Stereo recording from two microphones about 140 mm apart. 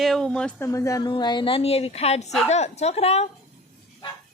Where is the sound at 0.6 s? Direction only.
20° left (ahead or behind); by 3.3 s 50° left (ahead or behind).